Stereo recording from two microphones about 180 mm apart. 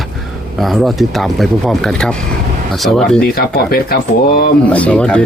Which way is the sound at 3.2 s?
55° left (ahead or behind).